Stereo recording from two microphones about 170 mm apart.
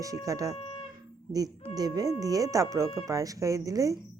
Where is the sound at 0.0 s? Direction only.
20° right (ahead or behind).